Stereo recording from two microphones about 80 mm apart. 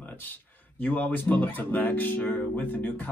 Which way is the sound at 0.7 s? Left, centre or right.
Centre.